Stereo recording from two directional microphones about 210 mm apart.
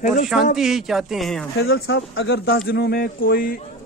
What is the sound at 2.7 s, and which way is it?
Speech, 45° left (ahead or behind).